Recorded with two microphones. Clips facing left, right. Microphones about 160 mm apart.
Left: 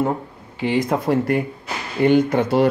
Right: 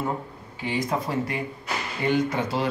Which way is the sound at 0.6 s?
70° left (ahead or behind).